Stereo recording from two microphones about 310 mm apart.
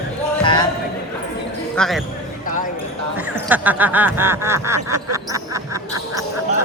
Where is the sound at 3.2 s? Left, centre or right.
Centre.